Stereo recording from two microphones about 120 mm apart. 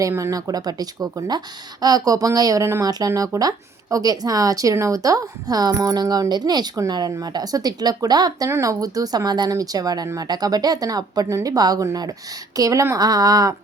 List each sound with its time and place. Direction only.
0.0 s speech: 25° right (ahead or behind)